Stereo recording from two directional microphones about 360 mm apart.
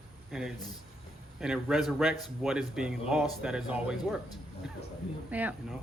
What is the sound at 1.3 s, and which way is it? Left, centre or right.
Speech, centre.